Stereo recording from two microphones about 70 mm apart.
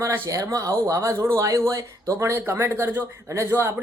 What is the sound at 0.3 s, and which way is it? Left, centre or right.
A man's voice, right.